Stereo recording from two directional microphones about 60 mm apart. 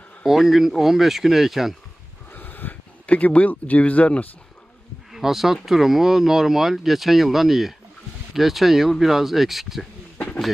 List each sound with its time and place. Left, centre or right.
0.3 s speech: centre
2.3 s speech: left
5.1 s speech: centre